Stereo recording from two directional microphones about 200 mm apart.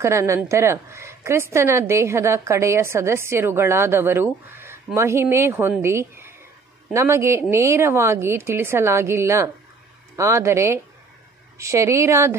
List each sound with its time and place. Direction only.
0.0 s a woman's voice: 15° right (ahead or behind)